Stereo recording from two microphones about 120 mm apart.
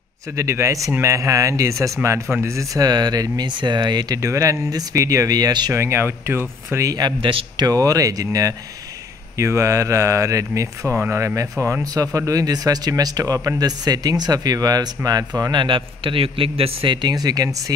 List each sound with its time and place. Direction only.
0.4 s speech: 25° right (ahead or behind)
5.7 s speech: 20° right (ahead or behind)
7.2 s a man's voice: 45° right (ahead or behind)
7.6 s speech: 30° right (ahead or behind)
15.6 s a man's voice: 45° right (ahead or behind); by 17.7 s 30° right (ahead or behind)